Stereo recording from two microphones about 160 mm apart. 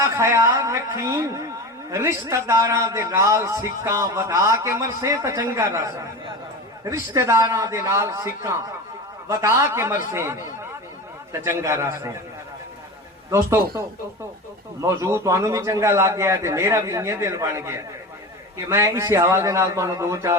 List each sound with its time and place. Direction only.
0.0 s a man's voice: 15° right (ahead or behind)
13.3 s a man's voice: 15° right (ahead or behind)